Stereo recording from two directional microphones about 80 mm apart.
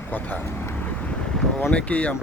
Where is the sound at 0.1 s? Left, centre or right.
Left.